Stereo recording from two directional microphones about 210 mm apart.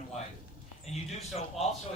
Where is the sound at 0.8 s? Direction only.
30° left (ahead or behind).